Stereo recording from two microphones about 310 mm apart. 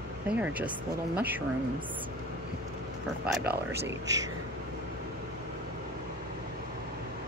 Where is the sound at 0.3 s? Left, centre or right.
Centre.